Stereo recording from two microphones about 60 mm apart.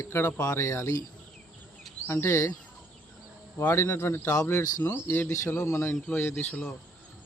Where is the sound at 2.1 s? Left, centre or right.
Left.